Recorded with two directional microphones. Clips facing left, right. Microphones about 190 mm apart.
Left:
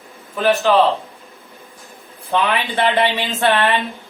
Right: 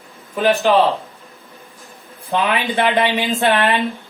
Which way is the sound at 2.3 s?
15° right (ahead or behind).